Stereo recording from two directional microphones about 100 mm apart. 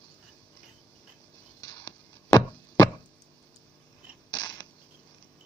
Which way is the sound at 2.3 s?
35° left (ahead or behind).